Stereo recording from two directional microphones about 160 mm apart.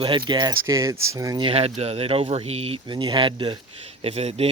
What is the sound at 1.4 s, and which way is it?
Speech, 40° right (ahead or behind).